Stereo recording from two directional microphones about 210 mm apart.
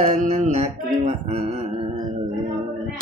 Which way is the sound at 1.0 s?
30° right (ahead or behind).